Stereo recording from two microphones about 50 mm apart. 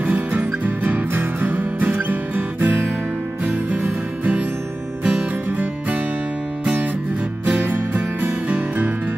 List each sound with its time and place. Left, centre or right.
0.0 s music: right
6.6 s music: right